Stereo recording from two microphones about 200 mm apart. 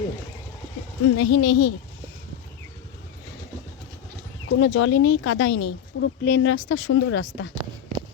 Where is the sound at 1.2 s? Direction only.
65° left (ahead or behind).